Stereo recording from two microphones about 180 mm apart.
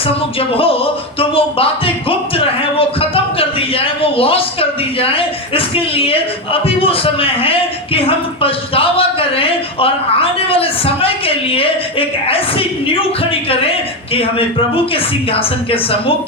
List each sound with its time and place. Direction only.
0.3 s speech: 30° left (ahead or behind)
3.3 s a sound: 30° left (ahead or behind)
4.9 s speech: 30° left (ahead or behind)